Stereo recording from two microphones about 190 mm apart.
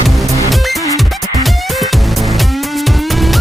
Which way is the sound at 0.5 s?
Centre (ahead or behind).